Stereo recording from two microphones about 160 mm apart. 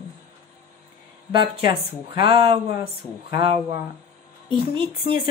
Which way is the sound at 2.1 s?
30° right (ahead or behind).